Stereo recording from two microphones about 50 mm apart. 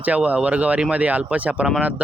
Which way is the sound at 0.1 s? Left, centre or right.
Right.